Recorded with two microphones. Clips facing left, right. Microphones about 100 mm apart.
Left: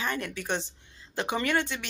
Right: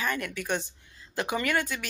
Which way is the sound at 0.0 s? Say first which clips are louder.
Right 1 dB; 30° left (ahead or behind).